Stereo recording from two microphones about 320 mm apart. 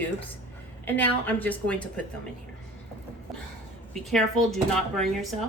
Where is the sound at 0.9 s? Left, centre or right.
Centre.